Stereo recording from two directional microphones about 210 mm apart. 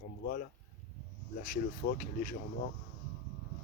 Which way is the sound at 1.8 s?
40° left (ahead or behind).